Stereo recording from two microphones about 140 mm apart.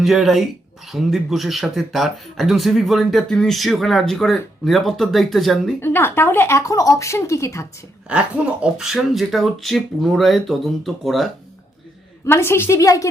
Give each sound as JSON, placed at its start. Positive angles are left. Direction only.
{"t": 0.0, "sound": "speech", "side_deg": 0}
{"t": 5.8, "sound": "speech", "side_deg": 15}
{"t": 8.6, "sound": "speech", "side_deg": -5}
{"t": 12.2, "sound": "speech", "side_deg": 20}